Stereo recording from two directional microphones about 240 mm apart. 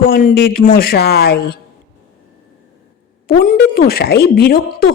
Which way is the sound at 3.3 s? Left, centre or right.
Left.